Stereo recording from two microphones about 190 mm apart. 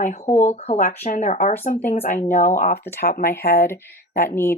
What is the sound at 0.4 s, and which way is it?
Speech, 40° left (ahead or behind).